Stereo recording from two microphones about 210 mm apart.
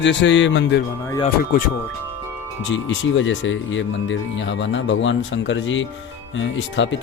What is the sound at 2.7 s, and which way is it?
Speech, 65° left (ahead or behind).